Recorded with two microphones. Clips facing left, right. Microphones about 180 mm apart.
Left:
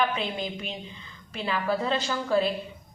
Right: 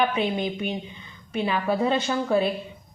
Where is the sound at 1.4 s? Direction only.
20° right (ahead or behind).